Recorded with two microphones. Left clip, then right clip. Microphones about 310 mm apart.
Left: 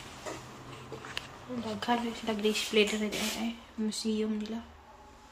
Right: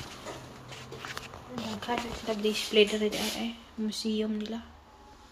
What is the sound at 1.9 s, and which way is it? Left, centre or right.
Speech, centre.